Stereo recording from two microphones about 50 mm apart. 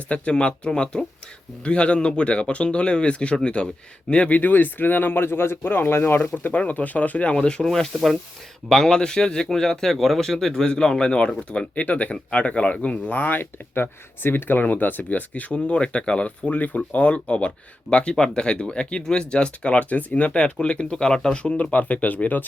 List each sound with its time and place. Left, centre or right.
0.1 s speech: left
4.4 s speech: left
6.3 s speech: left; by 7.9 s centre
7.9 s speech: centre
8.7 s speech: centre
13.1 s speech: left